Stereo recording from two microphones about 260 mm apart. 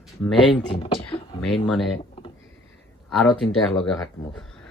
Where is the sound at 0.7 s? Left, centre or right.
Left.